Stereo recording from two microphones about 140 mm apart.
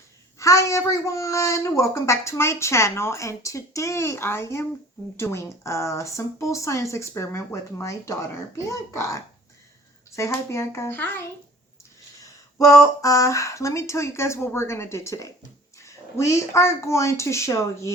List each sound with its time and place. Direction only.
0.3 s speech: 20° left (ahead or behind)